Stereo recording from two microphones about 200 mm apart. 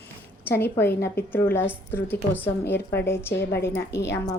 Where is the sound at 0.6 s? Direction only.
10° left (ahead or behind).